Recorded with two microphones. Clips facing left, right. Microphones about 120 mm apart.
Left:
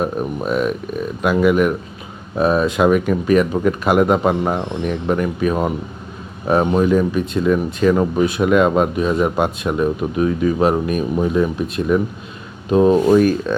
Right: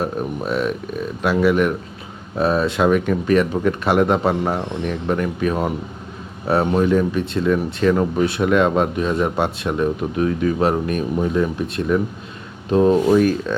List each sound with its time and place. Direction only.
0.4 s speech: 10° left (ahead or behind)
13.0 s speech: 45° left (ahead or behind)